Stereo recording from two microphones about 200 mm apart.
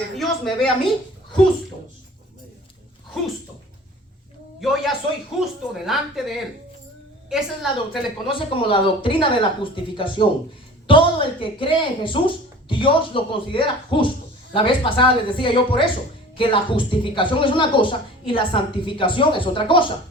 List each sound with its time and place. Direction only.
0.2 s a woman's voice: centre (ahead or behind)
4.6 s a woman's voice: centre (ahead or behind)
8.3 s a woman's voice: 25° left (ahead or behind)